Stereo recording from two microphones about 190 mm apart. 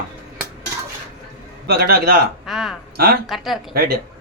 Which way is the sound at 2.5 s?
Centre (ahead or behind).